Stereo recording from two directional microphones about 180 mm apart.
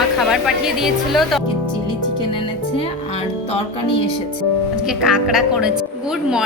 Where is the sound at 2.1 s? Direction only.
30° left (ahead or behind).